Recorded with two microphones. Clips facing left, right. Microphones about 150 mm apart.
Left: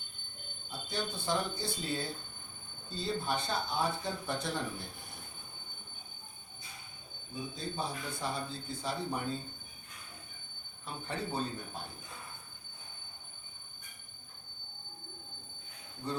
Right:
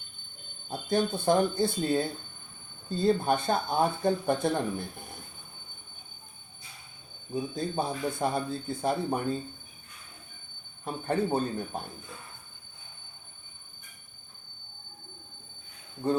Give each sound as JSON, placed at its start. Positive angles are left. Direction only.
{"t": 0.7, "sound": "speech", "side_deg": -50}
{"t": 7.5, "sound": "speech", "side_deg": -50}
{"t": 10.8, "sound": "speech", "side_deg": -50}
{"t": 16.0, "sound": "speech", "side_deg": -50}